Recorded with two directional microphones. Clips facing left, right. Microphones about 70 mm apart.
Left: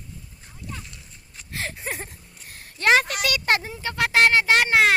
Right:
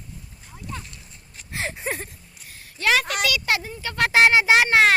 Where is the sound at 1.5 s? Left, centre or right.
Centre.